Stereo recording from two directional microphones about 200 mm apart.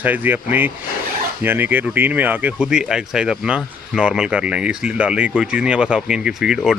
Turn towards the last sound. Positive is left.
turn(degrees=-5)  # may be behind; listen again after turning